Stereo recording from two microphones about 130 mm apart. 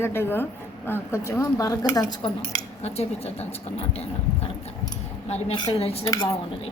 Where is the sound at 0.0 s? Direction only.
20° left (ahead or behind).